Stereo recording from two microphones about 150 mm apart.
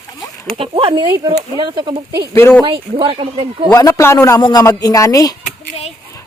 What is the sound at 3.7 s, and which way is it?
A man's voice, 20° left (ahead or behind).